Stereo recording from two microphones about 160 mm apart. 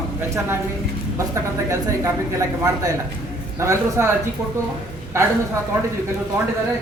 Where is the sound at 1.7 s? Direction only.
15° right (ahead or behind).